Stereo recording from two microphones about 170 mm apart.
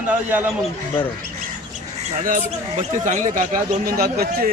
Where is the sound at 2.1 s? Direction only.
50° right (ahead or behind).